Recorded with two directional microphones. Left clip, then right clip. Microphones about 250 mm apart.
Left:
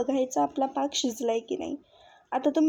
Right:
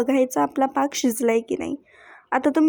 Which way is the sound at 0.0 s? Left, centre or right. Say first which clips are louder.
Right 6 dB; right.